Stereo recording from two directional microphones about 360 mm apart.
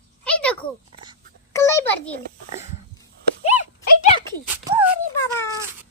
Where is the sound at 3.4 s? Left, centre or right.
Centre.